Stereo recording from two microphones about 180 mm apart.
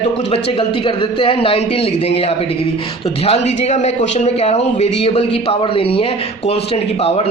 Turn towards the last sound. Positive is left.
turn(degrees=35)  # may be behind; listen again after turning